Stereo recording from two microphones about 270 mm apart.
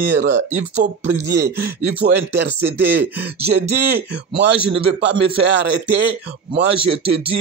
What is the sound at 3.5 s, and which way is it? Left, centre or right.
Speech, right.